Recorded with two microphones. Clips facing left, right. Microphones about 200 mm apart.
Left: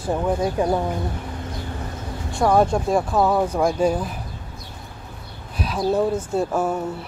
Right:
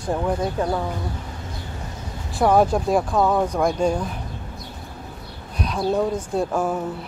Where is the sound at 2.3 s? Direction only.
Centre (ahead or behind).